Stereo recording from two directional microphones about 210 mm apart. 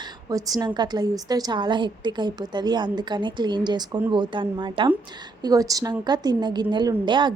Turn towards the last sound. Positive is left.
turn(degrees=-20)  # may be behind; listen again after turning